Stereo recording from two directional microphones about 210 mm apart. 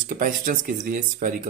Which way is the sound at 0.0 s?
40° right (ahead or behind).